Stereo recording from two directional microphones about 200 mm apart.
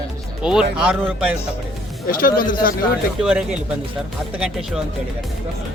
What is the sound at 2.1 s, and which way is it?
Speech, 45° left (ahead or behind).